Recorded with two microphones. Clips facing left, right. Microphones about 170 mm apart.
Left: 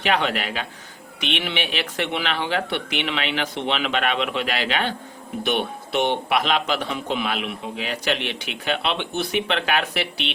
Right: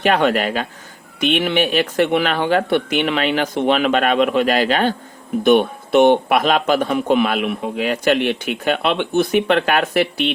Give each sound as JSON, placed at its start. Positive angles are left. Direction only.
{"t": 0.0, "sound": "a man's voice", "side_deg": -50}